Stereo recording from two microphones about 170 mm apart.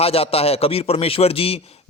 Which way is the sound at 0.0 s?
35° left (ahead or behind).